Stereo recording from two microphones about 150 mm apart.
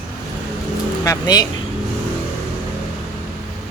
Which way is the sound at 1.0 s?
25° left (ahead or behind).